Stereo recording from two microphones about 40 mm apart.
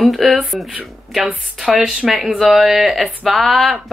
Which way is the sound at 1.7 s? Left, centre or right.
Centre.